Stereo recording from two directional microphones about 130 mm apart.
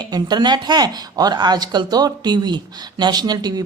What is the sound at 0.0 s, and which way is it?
A woman's voice, 35° right (ahead or behind).